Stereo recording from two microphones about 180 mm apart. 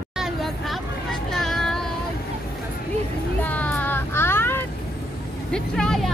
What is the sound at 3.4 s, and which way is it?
Child singing, 10° left (ahead or behind).